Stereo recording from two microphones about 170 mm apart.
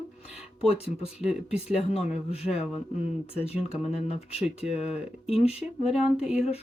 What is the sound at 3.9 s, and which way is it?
Speech, 35° left (ahead or behind).